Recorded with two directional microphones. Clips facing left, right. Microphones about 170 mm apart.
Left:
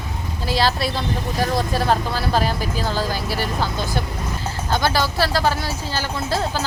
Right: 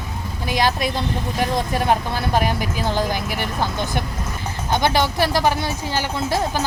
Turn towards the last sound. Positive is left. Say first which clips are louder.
# right 2 dB
turn(degrees=-15)  # may be behind; listen again after turning